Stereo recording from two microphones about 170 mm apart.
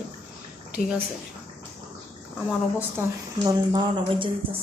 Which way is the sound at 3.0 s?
15° right (ahead or behind).